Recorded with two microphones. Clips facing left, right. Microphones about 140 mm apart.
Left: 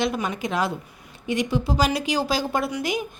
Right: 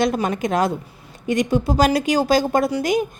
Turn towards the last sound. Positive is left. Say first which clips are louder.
# right 6 dB
turn(degrees=-45)  # may be behind; listen again after turning